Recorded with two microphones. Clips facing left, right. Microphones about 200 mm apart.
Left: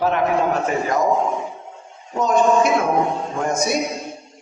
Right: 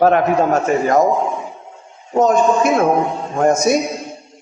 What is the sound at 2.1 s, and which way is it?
A man's voice, 45° right (ahead or behind).